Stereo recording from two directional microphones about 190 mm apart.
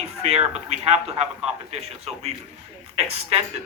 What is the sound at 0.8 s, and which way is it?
A man's voice, 35° right (ahead or behind).